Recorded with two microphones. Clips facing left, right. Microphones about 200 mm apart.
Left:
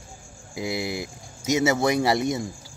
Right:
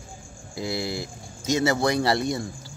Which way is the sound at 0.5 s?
15° left (ahead or behind).